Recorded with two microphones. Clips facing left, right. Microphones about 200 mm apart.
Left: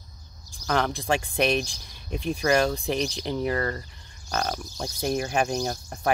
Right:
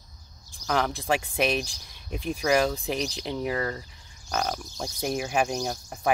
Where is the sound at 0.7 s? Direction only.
Centre (ahead or behind).